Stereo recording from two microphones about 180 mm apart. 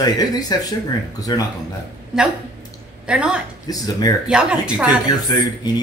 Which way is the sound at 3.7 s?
20° left (ahead or behind).